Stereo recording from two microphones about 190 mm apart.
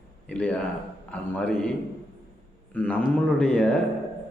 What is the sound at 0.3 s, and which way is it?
A man's voice, 5° left (ahead or behind).